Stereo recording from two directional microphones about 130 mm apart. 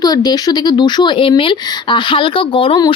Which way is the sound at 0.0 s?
30° left (ahead or behind).